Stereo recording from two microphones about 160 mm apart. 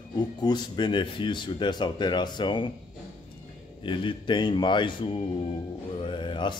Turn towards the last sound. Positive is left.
turn(degrees=30)  # may be behind; listen again after turning